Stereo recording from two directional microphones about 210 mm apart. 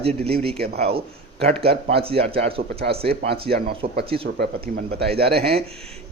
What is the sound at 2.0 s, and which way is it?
Speech, 25° right (ahead or behind).